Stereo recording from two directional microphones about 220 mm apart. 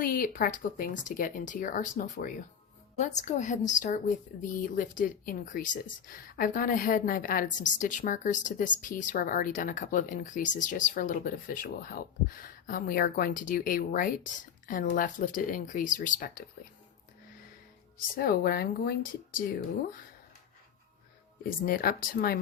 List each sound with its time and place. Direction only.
0.0 s speech: 40° left (ahead or behind)
17.9 s a woman's voice: 40° left (ahead or behind)
21.7 s a woman's voice: 40° left (ahead or behind)